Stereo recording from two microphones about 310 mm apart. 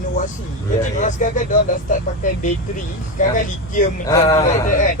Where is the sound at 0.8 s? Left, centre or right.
Left.